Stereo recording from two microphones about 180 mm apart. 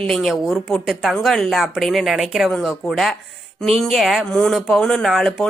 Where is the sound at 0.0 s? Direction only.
Centre (ahead or behind).